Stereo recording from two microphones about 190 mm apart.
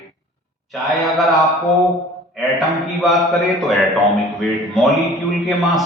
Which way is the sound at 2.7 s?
Centre (ahead or behind).